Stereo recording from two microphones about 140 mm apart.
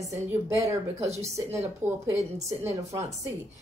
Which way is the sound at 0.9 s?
50° right (ahead or behind).